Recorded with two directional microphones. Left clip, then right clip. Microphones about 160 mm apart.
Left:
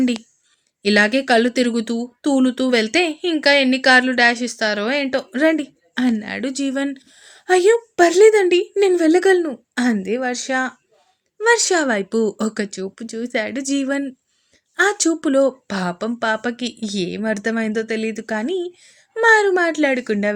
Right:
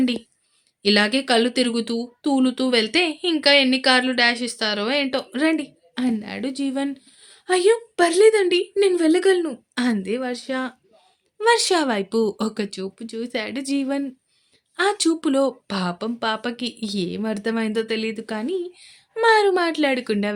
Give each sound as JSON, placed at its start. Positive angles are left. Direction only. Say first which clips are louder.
{"t": 0.8, "sound": "speech", "louder": "left 3 dB", "side_deg": 20}
{"t": 11.3, "sound": "speech", "louder": "left 2 dB", "side_deg": 10}